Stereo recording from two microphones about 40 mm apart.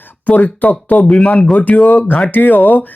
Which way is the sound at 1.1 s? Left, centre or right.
Centre.